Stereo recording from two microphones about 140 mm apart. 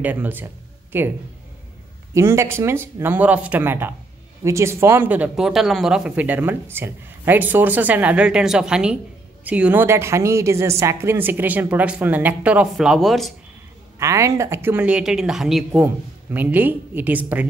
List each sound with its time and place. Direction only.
0.0 s speech: 10° right (ahead or behind)
2.1 s speech: 20° right (ahead or behind); by 13.3 s centre (ahead or behind)
13.9 s speech: 20° right (ahead or behind); by 15.8 s centre (ahead or behind)
15.8 s speech: 15° right (ahead or behind)